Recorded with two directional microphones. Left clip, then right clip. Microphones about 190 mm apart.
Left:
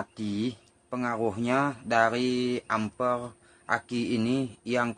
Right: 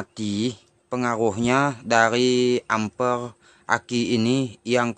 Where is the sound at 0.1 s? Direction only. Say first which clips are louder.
Right 6 dB; 60° right (ahead or behind).